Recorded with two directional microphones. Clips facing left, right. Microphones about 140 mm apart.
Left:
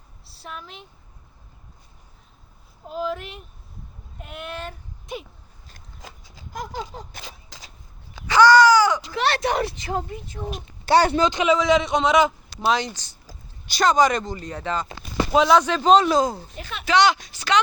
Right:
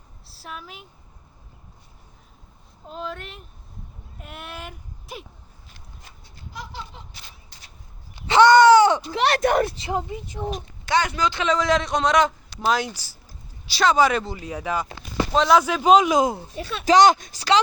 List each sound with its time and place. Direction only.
0.3 s a woman's voice: centre (ahead or behind)
2.9 s a man's voice: 5° left (ahead or behind)
6.0 s goat: 90° left
6.5 s a sound: 45° left (ahead or behind)
7.3 s a sound: 90° left
8.3 s caw: 25° right (ahead or behind)
9.3 s speech: 50° right (ahead or behind)
9.7 s speech: 25° right (ahead or behind)
10.8 s speech: 35° left (ahead or behind)
11.4 s a man's voice: centre (ahead or behind)
15.3 s speech: centre (ahead or behind); by 16.5 s 20° right (ahead or behind)
16.8 s speech: 40° right (ahead or behind)